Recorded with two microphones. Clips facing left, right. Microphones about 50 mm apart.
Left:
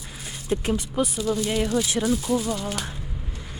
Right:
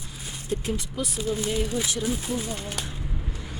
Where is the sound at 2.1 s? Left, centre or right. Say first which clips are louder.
Left 5 dB; right.